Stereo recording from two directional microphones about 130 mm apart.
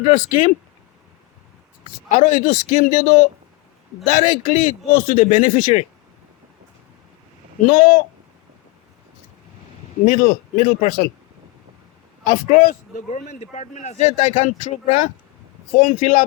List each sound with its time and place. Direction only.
0.0 s a man's voice: 70° left (ahead or behind)
2.0 s a man's voice: 70° left (ahead or behind)
7.7 s a man's voice: 75° left (ahead or behind)
10.1 s a man's voice: 80° left
12.2 s a man's voice: 85° left